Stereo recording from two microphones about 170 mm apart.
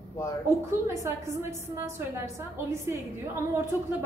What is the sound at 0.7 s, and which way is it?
A woman's voice, 15° right (ahead or behind).